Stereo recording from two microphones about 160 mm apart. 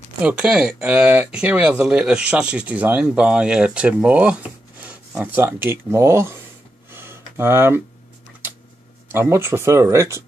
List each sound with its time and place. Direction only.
0.2 s speech: 5° right (ahead or behind)
6.9 s a sound: 15° right (ahead or behind)
9.1 s speech: 15° right (ahead or behind)